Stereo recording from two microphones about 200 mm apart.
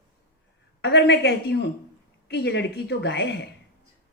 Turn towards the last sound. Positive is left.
turn(degrees=60)  # may be behind; listen again after turning